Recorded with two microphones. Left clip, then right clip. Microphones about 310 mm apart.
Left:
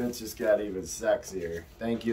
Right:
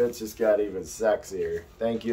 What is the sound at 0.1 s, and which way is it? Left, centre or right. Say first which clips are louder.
Speech: right 3 dB; centre.